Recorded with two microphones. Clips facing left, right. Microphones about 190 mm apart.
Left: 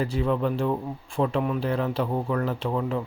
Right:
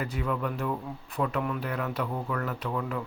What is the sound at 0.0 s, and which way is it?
Speech, 30° left (ahead or behind).